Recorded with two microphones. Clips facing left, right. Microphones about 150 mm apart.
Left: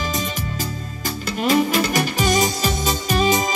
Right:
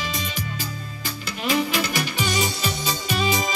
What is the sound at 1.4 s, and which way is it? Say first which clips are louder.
Music: left 5 dB; 45° left (ahead or behind).